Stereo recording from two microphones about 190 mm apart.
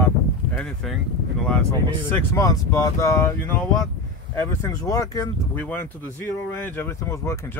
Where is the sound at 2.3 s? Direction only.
15° left (ahead or behind).